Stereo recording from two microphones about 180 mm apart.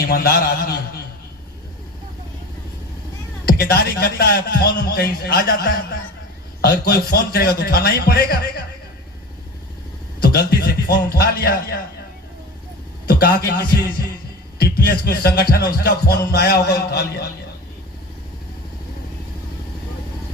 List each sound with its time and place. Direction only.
0.1 s music: 55° left (ahead or behind)
3.4 s music: 60° left (ahead or behind)
10.2 s music: 60° left (ahead or behind)
13.1 s music: 60° left (ahead or behind)